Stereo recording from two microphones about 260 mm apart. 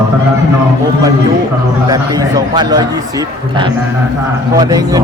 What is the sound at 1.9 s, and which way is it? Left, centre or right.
A man's voice, centre.